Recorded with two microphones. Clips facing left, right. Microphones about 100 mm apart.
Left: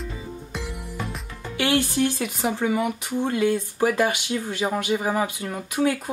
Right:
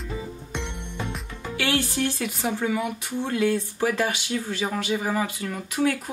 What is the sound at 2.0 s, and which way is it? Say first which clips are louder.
Speech: left 2 dB; 15° left (ahead or behind).